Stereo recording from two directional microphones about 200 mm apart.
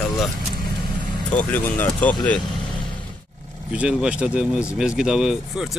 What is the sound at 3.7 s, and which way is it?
Speech, 5° right (ahead or behind).